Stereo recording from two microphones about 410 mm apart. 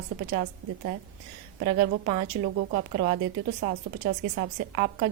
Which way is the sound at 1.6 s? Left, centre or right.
Centre.